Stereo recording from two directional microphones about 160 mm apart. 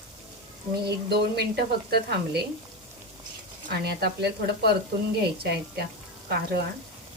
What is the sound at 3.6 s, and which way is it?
Speech, 85° right.